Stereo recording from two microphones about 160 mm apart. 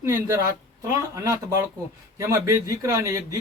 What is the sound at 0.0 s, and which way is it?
Speech, 20° right (ahead or behind).